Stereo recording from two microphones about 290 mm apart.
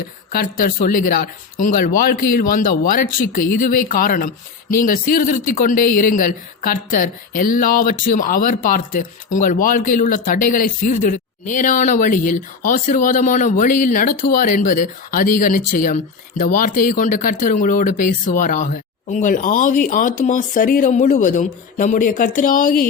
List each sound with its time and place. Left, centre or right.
0.3 s speech: left